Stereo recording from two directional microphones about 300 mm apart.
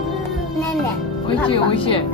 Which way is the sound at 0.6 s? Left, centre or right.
Centre.